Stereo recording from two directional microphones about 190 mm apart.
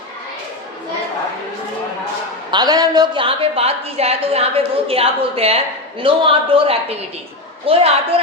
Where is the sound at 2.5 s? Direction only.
20° right (ahead or behind).